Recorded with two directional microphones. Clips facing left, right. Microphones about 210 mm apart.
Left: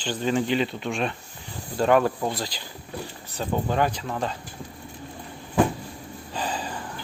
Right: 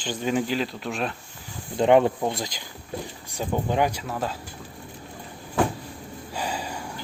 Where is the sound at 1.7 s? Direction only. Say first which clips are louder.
Right 2 dB; 20° right (ahead or behind); by 4.4 s 5° right (ahead or behind).